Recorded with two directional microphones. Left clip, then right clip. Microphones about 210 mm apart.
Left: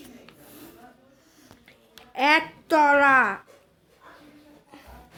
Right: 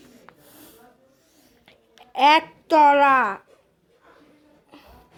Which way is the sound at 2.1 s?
10° right (ahead or behind).